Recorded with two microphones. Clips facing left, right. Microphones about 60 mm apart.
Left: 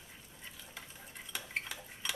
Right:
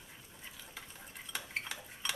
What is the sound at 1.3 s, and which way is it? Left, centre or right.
Cutlery, centre.